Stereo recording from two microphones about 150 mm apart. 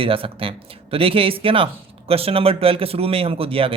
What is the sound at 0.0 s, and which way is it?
Speech, 40° right (ahead or behind).